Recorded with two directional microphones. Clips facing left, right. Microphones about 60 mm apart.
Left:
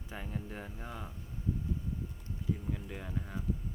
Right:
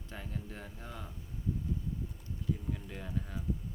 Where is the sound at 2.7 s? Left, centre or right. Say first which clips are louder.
Even; centre.